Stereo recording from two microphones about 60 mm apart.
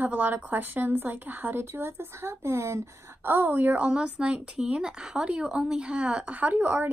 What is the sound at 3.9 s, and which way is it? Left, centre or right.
Speech, centre.